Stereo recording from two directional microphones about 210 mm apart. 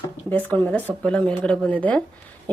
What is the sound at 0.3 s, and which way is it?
Speech, 10° left (ahead or behind).